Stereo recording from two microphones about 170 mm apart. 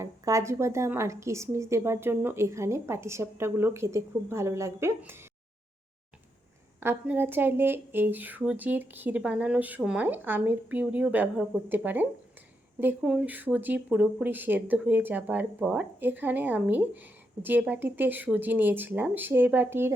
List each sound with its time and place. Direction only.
0.0 s speech: 15° right (ahead or behind)
6.7 s speech: 15° right (ahead or behind)